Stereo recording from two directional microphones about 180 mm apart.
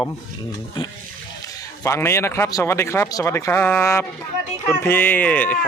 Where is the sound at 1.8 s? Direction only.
15° left (ahead or behind).